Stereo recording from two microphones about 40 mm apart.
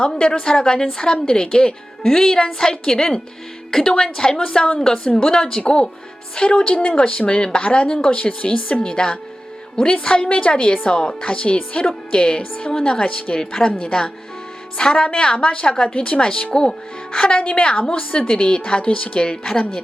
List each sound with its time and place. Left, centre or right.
0.1 s a woman's voice: left
5.6 s a woman's voice: left
14.8 s a woman's voice: left